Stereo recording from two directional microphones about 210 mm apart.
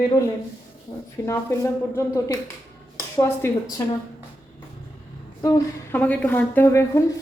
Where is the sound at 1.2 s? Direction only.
15° left (ahead or behind).